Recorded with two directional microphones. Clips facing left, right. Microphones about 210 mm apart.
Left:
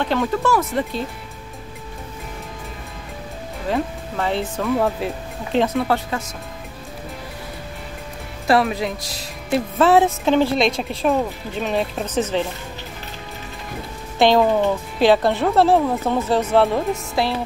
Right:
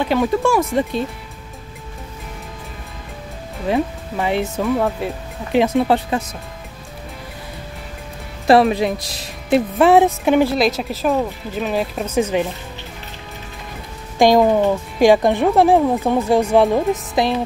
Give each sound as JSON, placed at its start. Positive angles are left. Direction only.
{"t": 0.0, "sound": "speech", "side_deg": -10}
{"t": 3.6, "sound": "speech", "side_deg": -15}
{"t": 4.6, "sound": "speech", "side_deg": 0}
{"t": 5.6, "sound": "speech", "side_deg": -15}
{"t": 8.5, "sound": "speech", "side_deg": -25}
{"t": 9.5, "sound": "speech", "side_deg": -15}
{"t": 10.5, "sound": "speech", "side_deg": -5}
{"t": 14.1, "sound": "speech", "side_deg": -10}